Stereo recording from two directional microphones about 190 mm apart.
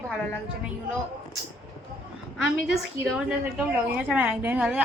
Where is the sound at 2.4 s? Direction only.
Centre (ahead or behind).